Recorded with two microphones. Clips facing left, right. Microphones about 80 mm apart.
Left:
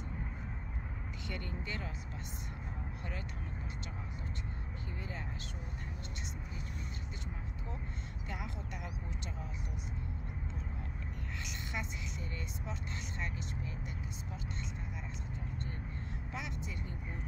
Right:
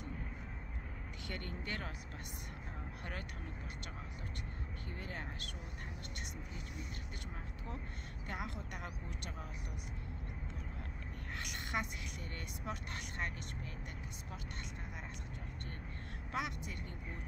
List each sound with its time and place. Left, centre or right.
1.2 s speech: right
8.3 s speech: right
11.4 s a woman's voice: right
16.3 s speech: right